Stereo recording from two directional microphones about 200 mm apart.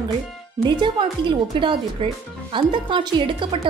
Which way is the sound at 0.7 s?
25° right (ahead or behind).